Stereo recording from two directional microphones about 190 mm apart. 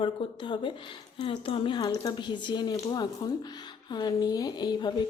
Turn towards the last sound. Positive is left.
turn(degrees=20)  # may be behind; listen again after turning